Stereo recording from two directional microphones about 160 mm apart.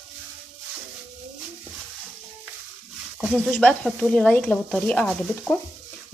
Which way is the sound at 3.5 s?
5° left (ahead or behind).